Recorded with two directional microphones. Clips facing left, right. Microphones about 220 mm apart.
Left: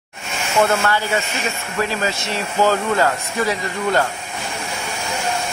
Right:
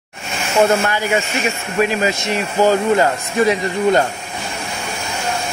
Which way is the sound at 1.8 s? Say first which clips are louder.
Right 5 dB; 15° right (ahead or behind).